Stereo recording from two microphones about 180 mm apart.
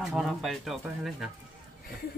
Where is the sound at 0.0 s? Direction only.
Centre (ahead or behind).